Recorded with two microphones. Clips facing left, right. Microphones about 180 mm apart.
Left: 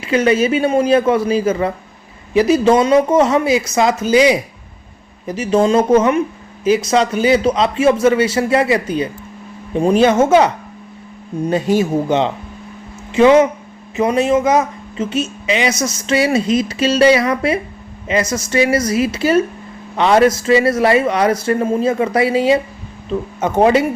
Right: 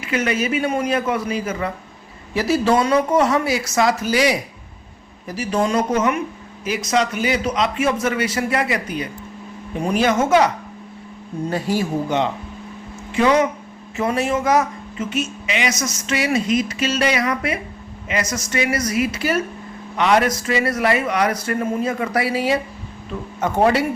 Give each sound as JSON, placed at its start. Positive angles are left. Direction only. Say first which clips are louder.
{"t": 0.0, "sound": "speech", "louder": "left 7 dB", "side_deg": 30}
{"t": 2.3, "sound": "speech", "louder": "left 6 dB", "side_deg": 20}